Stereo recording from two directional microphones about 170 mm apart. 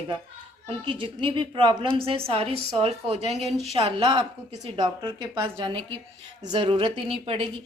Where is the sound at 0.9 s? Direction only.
30° right (ahead or behind).